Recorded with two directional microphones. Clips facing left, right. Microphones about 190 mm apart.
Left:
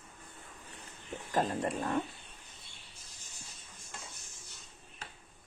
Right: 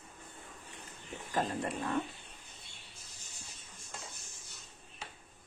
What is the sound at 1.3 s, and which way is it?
Wild animals, 40° left (ahead or behind).